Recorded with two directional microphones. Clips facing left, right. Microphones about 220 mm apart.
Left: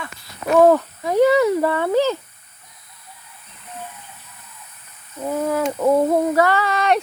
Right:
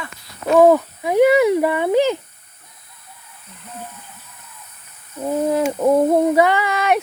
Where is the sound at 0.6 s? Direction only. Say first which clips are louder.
Right 1 dB; 10° right (ahead or behind).